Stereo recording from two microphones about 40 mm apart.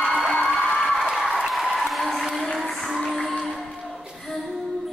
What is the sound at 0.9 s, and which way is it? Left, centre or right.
Applause, centre.